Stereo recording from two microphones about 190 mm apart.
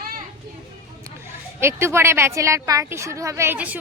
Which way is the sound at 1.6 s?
15° right (ahead or behind).